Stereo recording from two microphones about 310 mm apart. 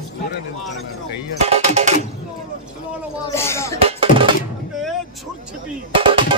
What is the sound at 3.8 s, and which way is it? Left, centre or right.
Music, centre.